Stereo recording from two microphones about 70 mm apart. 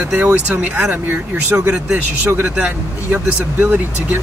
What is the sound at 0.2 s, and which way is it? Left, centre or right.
Speech, centre.